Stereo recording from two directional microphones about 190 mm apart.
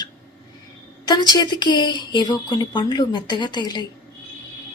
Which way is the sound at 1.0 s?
20° left (ahead or behind).